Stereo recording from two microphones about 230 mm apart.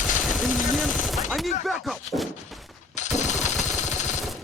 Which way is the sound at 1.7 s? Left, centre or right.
Centre.